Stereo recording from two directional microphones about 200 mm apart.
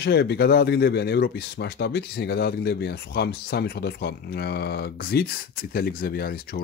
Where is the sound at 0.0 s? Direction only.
55° left (ahead or behind).